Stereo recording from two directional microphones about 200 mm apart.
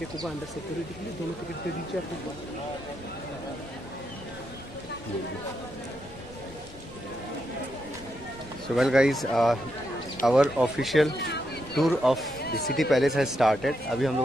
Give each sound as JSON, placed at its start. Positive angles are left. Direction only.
{"t": 8.7, "sound": "speech", "side_deg": -5}
{"t": 11.1, "sound": "speech", "side_deg": 55}
{"t": 11.7, "sound": "speech", "side_deg": 0}
{"t": 12.4, "sound": "a sound", "side_deg": 50}
{"t": 12.7, "sound": "speech", "side_deg": 0}